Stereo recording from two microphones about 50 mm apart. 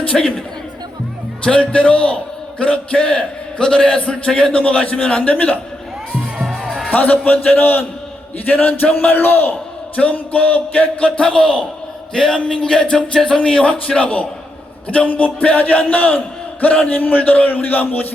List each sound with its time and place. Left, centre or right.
0.1 s music: centre
1.5 s a man's voice: left
6.4 s music: centre
6.9 s a man's voice: left
11.2 s music: centre
13.1 s a man's voice: centre; by 18.1 s left